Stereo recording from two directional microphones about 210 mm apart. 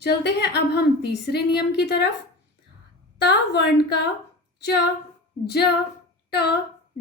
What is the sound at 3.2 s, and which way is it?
Speech, 55° left (ahead or behind).